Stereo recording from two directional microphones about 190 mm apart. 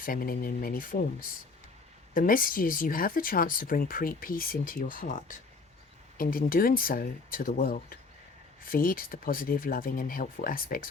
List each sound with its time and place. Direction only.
0.0 s speech: 50° left (ahead or behind)